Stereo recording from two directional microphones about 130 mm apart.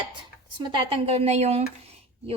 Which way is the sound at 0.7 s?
50° right (ahead or behind).